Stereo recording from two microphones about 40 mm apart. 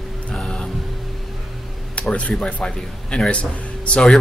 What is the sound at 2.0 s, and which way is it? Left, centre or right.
Speech, left.